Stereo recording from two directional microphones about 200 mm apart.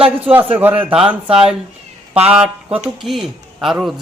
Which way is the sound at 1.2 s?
30° right (ahead or behind).